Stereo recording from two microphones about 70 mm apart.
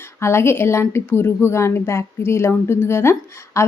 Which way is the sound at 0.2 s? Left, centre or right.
Left.